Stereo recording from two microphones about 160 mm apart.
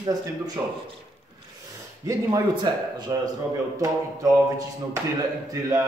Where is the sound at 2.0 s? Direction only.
20° right (ahead or behind).